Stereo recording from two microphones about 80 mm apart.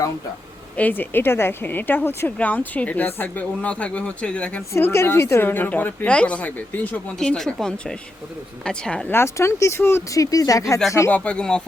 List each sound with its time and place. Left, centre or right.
0.8 s speech: left
4.7 s speech: left
7.2 s speech: centre
9.0 s speech: left
11.1 s speech: centre